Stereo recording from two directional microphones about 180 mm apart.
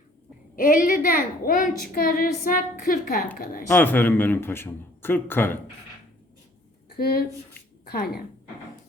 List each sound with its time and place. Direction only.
0.5 s a woman's voice: 50° left (ahead or behind)
3.7 s a man's voice: 10° left (ahead or behind)
6.9 s speech: 60° left (ahead or behind)